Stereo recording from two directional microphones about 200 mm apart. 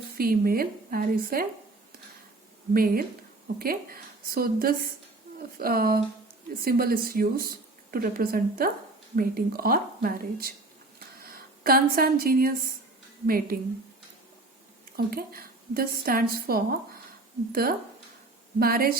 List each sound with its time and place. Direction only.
0.2 s speech: 45° right (ahead or behind)
2.7 s speech: 45° right (ahead or behind)
14.9 s speech: 45° right (ahead or behind)